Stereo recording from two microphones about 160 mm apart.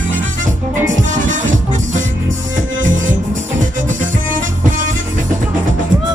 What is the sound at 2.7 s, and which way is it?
Music, 55° right (ahead or behind).